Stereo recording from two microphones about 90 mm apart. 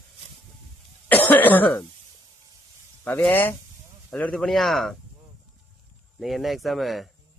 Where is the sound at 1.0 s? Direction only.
20° left (ahead or behind).